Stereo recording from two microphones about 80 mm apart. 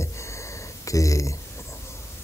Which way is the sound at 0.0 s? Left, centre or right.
Left.